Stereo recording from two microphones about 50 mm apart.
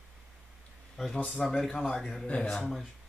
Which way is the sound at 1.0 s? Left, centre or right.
Centre.